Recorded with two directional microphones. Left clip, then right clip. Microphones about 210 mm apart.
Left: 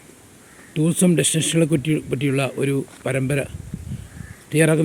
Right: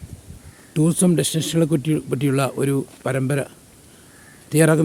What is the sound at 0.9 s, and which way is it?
Speech, 5° right (ahead or behind).